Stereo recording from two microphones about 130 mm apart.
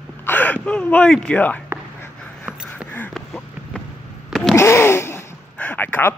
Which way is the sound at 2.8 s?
15° left (ahead or behind).